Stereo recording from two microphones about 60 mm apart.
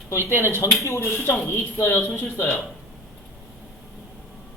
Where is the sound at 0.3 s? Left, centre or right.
Left.